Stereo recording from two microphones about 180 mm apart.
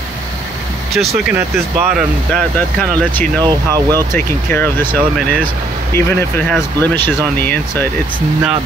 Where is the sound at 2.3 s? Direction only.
5° left (ahead or behind).